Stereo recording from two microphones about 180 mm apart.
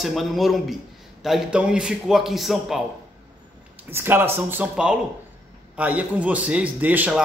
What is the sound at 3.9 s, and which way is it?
A man's voice, 10° right (ahead or behind).